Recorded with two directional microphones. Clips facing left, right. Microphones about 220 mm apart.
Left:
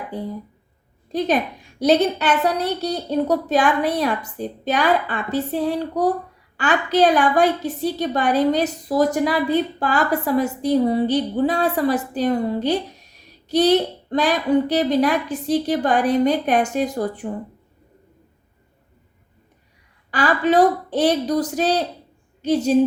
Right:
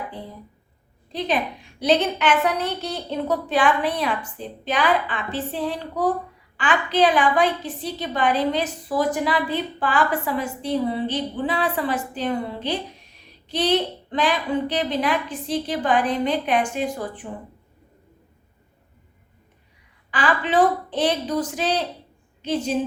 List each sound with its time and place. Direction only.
1.8 s a woman's voice: 40° left (ahead or behind)
20.1 s a woman's voice: 40° left (ahead or behind)